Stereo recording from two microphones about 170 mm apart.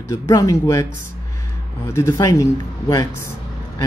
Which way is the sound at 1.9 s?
15° left (ahead or behind).